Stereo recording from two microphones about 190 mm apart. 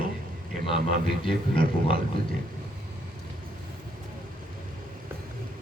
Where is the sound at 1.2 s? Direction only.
30° left (ahead or behind).